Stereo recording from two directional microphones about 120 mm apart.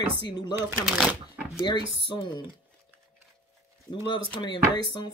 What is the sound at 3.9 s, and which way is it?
Speech, 40° left (ahead or behind).